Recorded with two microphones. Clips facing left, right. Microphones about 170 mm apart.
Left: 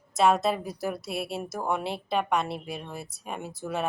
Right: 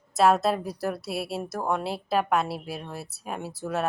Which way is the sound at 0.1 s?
Centre (ahead or behind).